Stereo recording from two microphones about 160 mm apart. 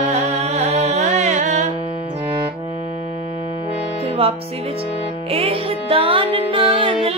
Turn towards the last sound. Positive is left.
turn(degrees=-35)  # may be behind; listen again after turning